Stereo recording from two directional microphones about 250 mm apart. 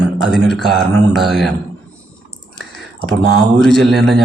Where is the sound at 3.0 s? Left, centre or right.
Right.